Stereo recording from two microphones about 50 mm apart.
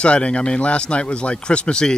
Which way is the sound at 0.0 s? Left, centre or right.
Left.